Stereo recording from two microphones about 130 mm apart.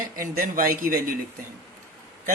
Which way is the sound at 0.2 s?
90° right.